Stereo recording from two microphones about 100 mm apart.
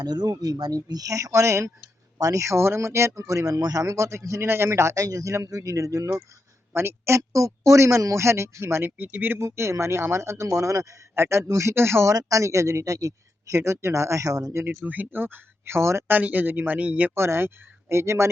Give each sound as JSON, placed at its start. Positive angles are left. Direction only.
{"t": 0.0, "sound": "speech", "side_deg": -45}
{"t": 14.8, "sound": "speech", "side_deg": -20}
{"t": 17.2, "sound": "speech", "side_deg": -25}